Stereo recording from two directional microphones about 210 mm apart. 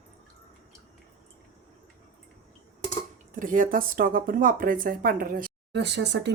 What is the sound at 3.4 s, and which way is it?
Speech, 40° right (ahead or behind).